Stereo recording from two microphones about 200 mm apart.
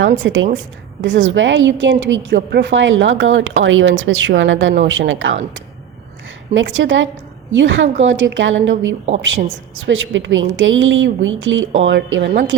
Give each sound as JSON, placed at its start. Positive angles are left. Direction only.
{"t": 0.0, "sound": "a woman's voice", "side_deg": -70}
{"t": 6.5, "sound": "a woman's voice", "side_deg": -70}